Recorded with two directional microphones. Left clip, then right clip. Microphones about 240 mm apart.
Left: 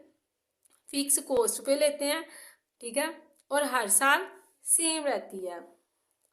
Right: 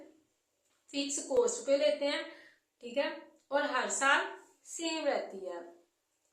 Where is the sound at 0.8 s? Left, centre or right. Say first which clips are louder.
Left 5 dB; left.